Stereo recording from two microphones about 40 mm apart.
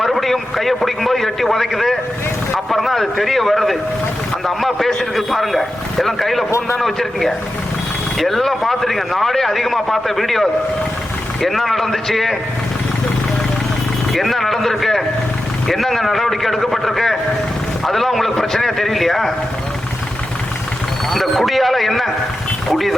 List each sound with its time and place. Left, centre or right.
0.0 s a man's voice: centre
14.1 s a man's voice: centre
21.1 s a man's voice: centre